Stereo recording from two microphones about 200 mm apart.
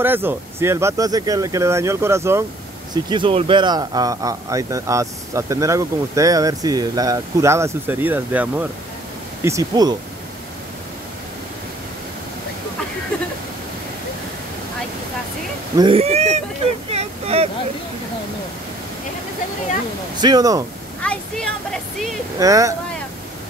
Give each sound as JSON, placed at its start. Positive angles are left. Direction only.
{"t": 0.0, "sound": "a man's voice", "side_deg": -10}
{"t": 2.9, "sound": "a man's voice", "side_deg": -25}
{"t": 15.8, "sound": "speech", "side_deg": -30}
{"t": 16.9, "sound": "vehicle", "side_deg": -30}
{"t": 20.2, "sound": "speech", "side_deg": -20}
{"t": 21.0, "sound": "speech", "side_deg": 5}
{"t": 22.4, "sound": "a man's voice", "side_deg": -15}